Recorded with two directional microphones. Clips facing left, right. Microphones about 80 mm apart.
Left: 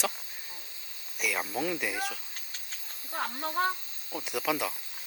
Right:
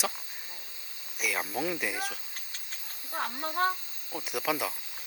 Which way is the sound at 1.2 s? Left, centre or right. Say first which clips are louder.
Even; centre.